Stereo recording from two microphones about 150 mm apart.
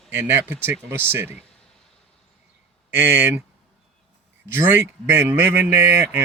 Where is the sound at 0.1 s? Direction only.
15° right (ahead or behind).